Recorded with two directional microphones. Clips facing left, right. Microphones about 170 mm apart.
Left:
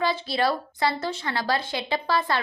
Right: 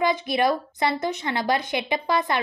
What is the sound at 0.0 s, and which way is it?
Speech, 20° right (ahead or behind).